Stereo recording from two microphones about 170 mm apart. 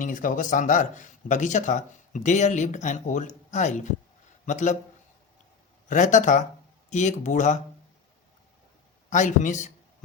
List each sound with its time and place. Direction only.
0.0 s speech: 50° left (ahead or behind)
5.9 s speech: 45° left (ahead or behind)
9.0 s speech: 45° left (ahead or behind)